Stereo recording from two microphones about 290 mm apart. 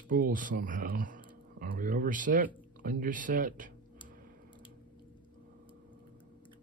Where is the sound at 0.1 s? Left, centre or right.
Right.